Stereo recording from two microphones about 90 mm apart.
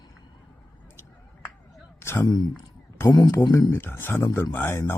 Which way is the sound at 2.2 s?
50° left (ahead or behind).